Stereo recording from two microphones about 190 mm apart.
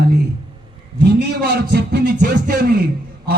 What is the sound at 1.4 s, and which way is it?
Speech, 55° right (ahead or behind).